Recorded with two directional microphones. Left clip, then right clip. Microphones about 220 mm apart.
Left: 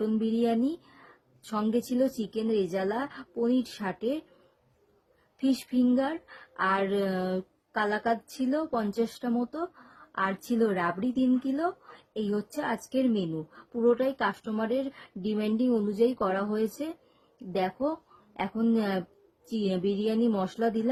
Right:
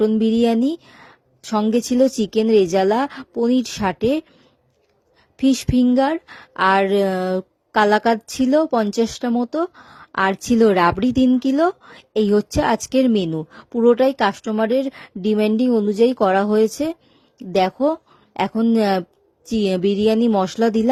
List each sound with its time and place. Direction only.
0.2 s speech: 40° right (ahead or behind)
5.4 s speech: 40° right (ahead or behind)